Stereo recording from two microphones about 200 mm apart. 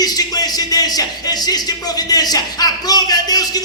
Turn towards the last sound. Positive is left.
turn(degrees=20)  # may be behind; listen again after turning